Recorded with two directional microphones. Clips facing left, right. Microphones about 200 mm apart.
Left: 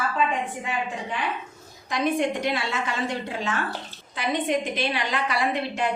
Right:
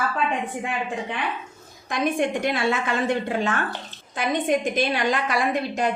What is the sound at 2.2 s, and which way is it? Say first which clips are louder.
A woman's voice: right 2 dB; 50° right (ahead or behind).